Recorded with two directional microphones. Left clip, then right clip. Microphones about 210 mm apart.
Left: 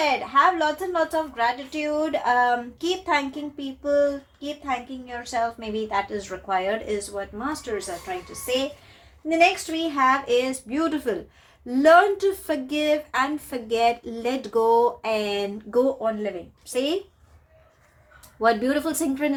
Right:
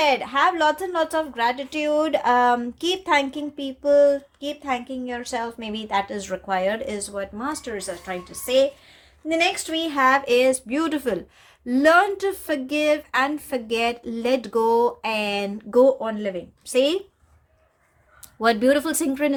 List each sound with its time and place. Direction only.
0.0 s a woman's voice: 55° right (ahead or behind)
18.3 s speech: 45° right (ahead or behind)